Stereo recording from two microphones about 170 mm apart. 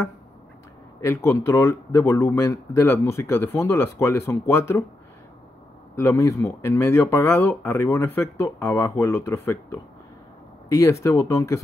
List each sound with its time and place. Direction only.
1.0 s speech: 15° left (ahead or behind)
5.9 s speech: 15° left (ahead or behind)